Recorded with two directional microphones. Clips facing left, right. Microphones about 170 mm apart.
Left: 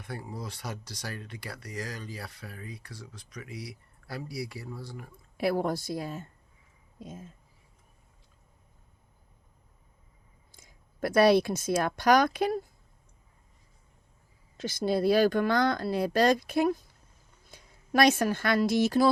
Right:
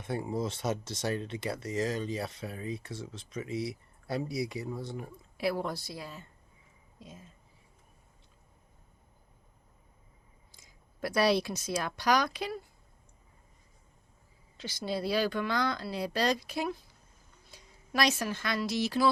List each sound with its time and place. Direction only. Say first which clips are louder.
0.0 s speech: right 6 dB; 25° right (ahead or behind)
5.4 s speech: left 4 dB; 50° left (ahead or behind)
10.5 s speech: left 2 dB; 50° left (ahead or behind)
14.6 s speech: left 7 dB; 50° left (ahead or behind)